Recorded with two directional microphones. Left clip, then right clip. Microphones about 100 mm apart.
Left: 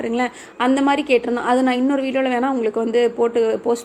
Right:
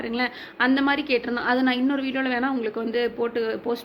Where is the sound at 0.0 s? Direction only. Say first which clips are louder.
Left 5 dB; 40° left (ahead or behind).